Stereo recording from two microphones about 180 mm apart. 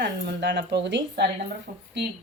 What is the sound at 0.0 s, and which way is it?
Speech, 75° right (ahead or behind).